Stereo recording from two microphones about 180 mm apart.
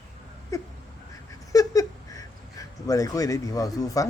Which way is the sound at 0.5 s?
15° left (ahead or behind).